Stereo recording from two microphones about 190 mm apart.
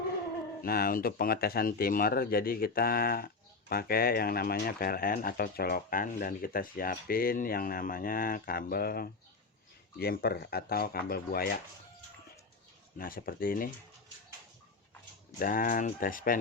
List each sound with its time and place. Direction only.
0.6 s speech: 50° left (ahead or behind)
13.0 s speech: 50° left (ahead or behind)
15.4 s speech: 45° left (ahead or behind)